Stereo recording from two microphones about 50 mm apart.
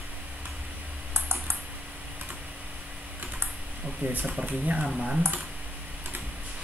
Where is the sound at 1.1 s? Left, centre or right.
Right.